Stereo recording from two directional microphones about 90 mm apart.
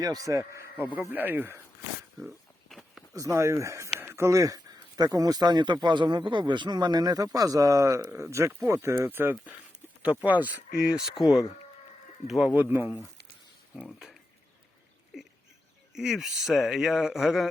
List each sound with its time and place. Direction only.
0.0 s speech: 45° right (ahead or behind)
1.1 s speech: 20° right (ahead or behind)
2.1 s a sound: centre (ahead or behind)
3.1 s speech: 35° right (ahead or behind); by 10.5 s 15° right (ahead or behind)
10.8 s speech: 5° right (ahead or behind)
12.5 s speech: 20° right (ahead or behind)
13.7 s speech: 5° right (ahead or behind)
15.1 s a sound: 5° right (ahead or behind)
16.0 s speech: 5° right (ahead or behind)